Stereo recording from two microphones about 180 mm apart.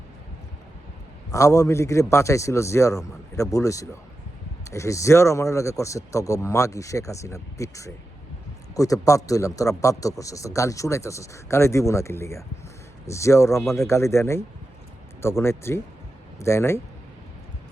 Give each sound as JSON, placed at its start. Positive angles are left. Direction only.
{"t": 1.3, "sound": "speech", "side_deg": 15}